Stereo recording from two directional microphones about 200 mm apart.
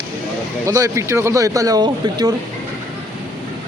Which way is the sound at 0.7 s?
15° right (ahead or behind).